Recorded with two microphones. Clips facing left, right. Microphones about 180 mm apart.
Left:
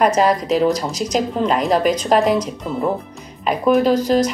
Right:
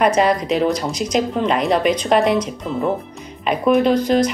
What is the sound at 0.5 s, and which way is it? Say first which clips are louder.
Speech: left 1 dB; centre (ahead or behind).